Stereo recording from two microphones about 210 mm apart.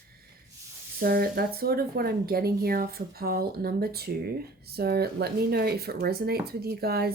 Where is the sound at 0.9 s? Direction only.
45° right (ahead or behind).